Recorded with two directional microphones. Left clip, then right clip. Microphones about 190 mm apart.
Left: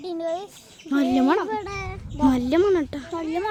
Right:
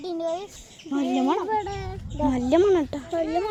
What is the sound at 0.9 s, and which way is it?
Speech, 30° left (ahead or behind).